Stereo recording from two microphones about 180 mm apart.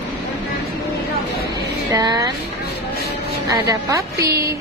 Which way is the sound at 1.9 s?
20° right (ahead or behind).